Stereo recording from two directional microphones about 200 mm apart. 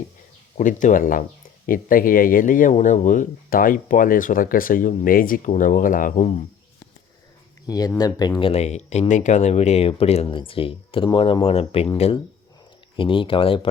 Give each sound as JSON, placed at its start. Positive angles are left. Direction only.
{"t": 0.5, "sound": "speech", "side_deg": 40}
{"t": 7.7, "sound": "speech", "side_deg": 20}